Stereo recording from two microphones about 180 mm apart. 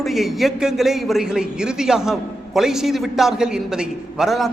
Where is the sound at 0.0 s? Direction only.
Centre (ahead or behind).